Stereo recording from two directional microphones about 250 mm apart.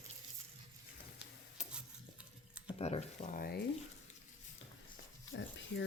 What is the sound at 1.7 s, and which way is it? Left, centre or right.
Stir, centre.